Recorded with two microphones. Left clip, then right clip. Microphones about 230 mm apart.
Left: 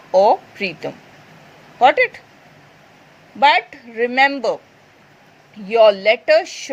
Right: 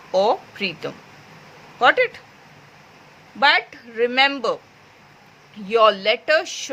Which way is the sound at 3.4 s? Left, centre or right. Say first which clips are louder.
Left 3 dB; centre.